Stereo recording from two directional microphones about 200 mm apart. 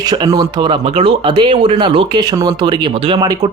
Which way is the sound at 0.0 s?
20° right (ahead or behind).